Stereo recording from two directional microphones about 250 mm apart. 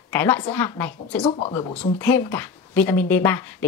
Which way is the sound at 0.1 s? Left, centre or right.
Centre.